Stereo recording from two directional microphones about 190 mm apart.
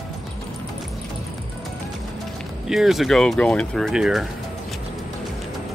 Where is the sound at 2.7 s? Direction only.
Centre (ahead or behind).